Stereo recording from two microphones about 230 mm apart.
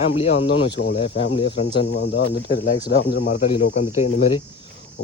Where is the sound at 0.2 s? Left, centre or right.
Left.